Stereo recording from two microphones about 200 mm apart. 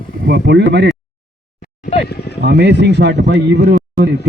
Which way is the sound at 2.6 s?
60° right (ahead or behind).